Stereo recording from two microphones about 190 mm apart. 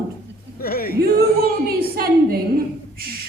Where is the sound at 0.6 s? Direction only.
50° left (ahead or behind).